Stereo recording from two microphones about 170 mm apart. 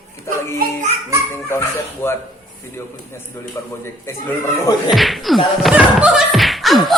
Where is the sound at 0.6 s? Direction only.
60° right (ahead or behind).